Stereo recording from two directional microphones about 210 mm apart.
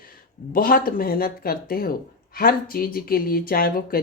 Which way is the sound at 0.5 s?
40° left (ahead or behind).